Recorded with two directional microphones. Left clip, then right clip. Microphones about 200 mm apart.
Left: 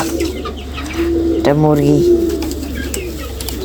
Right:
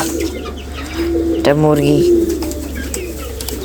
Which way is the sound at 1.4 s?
Centre (ahead or behind).